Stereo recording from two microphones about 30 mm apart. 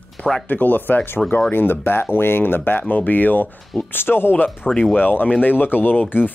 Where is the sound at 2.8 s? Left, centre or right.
Left.